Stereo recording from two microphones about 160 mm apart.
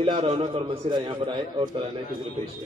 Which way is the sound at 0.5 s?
40° right (ahead or behind).